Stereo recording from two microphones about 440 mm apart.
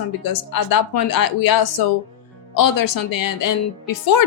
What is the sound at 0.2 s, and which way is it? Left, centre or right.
Speech, left.